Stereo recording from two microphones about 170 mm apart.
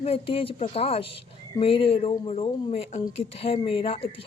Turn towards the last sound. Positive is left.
turn(degrees=35)  # may be behind; listen again after turning